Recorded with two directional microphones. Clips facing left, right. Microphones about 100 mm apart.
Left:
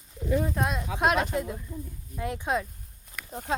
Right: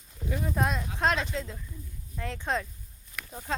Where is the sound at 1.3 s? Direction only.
15° left (ahead or behind).